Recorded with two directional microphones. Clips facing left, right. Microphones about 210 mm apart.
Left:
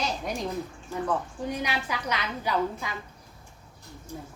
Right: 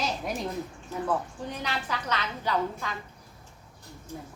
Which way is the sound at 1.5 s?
10° left (ahead or behind).